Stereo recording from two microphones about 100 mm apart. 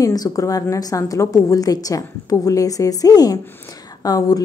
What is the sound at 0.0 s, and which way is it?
A woman's voice, 35° left (ahead or behind).